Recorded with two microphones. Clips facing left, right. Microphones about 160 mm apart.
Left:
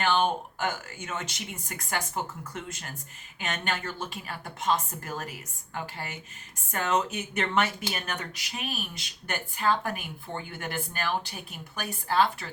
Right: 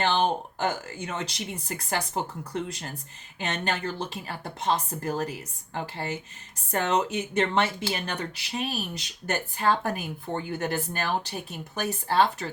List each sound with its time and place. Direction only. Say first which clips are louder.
0.0 s speech: right 1 dB; 30° right (ahead or behind)